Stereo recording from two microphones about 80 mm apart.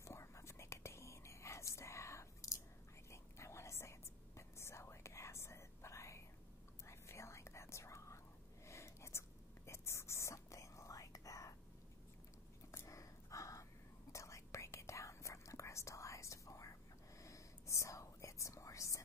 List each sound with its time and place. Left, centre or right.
0.0 s whispering: left
12.7 s gasp: left
14.1 s whispering: left